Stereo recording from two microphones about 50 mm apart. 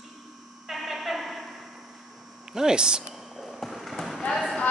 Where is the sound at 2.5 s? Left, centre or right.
Centre.